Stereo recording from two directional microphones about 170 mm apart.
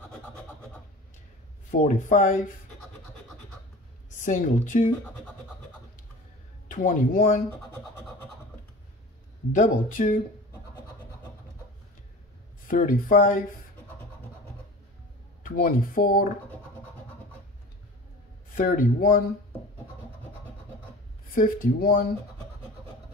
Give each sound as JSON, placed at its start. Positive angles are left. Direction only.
{"t": 1.7, "sound": "speech", "side_deg": 50}
{"t": 4.2, "sound": "speech", "side_deg": 50}
{"t": 6.7, "sound": "speech", "side_deg": 55}
{"t": 9.5, "sound": "speech", "side_deg": 50}
{"t": 12.6, "sound": "speech", "side_deg": 55}
{"t": 15.4, "sound": "speech", "side_deg": 60}
{"t": 18.5, "sound": "speech", "side_deg": 50}
{"t": 21.4, "sound": "speech", "side_deg": 55}